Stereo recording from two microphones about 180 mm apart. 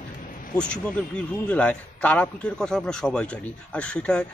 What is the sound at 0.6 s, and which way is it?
A man's voice, 5° left (ahead or behind).